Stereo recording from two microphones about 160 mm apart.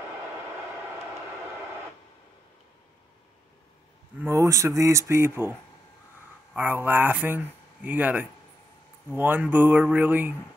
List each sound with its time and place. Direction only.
4.2 s speech: 20° right (ahead or behind)